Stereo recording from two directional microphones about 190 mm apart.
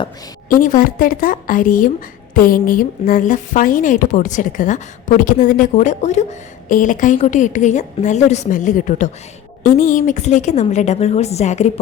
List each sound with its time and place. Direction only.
0.4 s a woman's voice: 45° left (ahead or behind)